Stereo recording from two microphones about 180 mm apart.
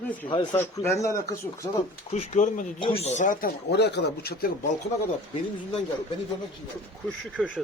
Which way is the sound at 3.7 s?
65° left (ahead or behind).